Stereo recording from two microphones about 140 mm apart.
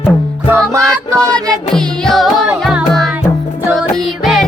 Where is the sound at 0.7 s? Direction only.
20° right (ahead or behind).